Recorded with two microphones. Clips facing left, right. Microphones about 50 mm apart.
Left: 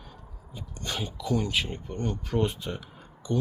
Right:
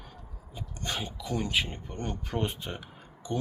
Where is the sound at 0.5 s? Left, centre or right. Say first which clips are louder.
Even; right.